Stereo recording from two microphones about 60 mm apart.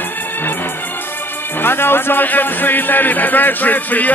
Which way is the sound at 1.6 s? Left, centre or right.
Left.